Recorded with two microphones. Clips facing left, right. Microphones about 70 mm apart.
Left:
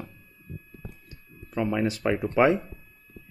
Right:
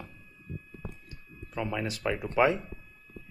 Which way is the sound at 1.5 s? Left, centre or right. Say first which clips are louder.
Left 7 dB; left.